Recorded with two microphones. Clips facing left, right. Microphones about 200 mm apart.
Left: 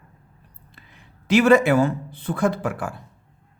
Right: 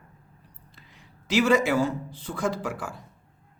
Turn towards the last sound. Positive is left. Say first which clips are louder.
# left 5 dB
turn(degrees=60)  # may be behind; listen again after turning